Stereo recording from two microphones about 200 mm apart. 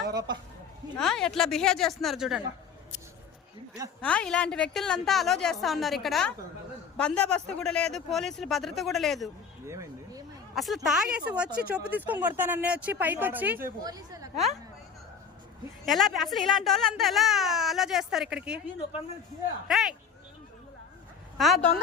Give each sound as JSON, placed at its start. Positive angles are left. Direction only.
{"t": 0.1, "sound": "a sound", "side_deg": -20}
{"t": 0.9, "sound": "speech", "side_deg": 0}
{"t": 4.0, "sound": "speech", "side_deg": 5}
{"t": 9.6, "sound": "a sound", "side_deg": -15}
{"t": 10.5, "sound": "speech", "side_deg": 0}
{"t": 15.9, "sound": "speech", "side_deg": 0}
{"t": 19.6, "sound": "speech", "side_deg": 0}
{"t": 21.3, "sound": "speech", "side_deg": 0}